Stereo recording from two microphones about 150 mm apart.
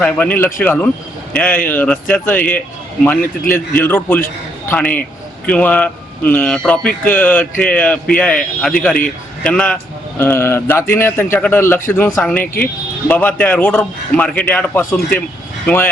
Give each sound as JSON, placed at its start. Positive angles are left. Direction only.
{"t": 0.0, "sound": "a man's voice", "side_deg": 10}